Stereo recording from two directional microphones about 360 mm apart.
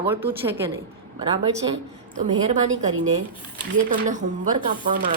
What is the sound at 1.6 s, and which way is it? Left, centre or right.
Speech, centre.